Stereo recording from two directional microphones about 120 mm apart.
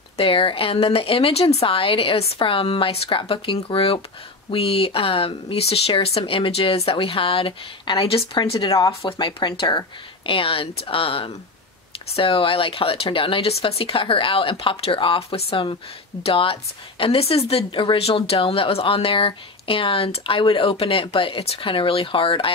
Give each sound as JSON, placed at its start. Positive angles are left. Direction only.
{"t": 0.2, "sound": "a woman's voice", "side_deg": 45}